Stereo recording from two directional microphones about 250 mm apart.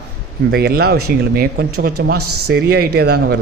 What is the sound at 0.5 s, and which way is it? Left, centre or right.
Speech, right.